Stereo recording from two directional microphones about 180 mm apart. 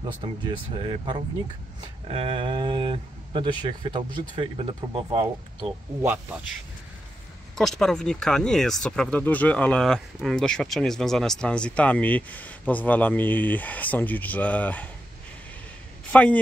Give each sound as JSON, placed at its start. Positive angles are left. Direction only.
{"t": 0.0, "sound": "speech", "side_deg": -25}
{"t": 6.0, "sound": "speech", "side_deg": -10}
{"t": 7.5, "sound": "speech", "side_deg": 0}
{"t": 16.1, "sound": "speech", "side_deg": 5}